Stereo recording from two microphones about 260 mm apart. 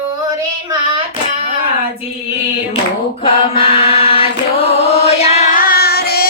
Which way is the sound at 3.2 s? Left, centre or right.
Centre.